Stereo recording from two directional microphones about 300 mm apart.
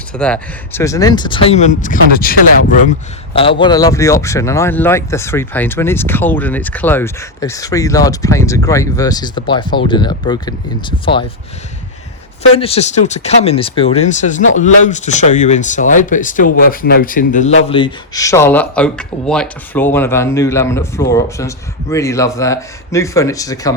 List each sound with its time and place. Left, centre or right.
0.2 s speech: centre; by 2.7 s left
3.3 s speech: centre
12.4 s speech: centre